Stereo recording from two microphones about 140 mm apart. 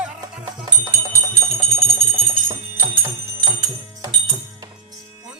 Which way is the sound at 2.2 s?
40° right (ahead or behind).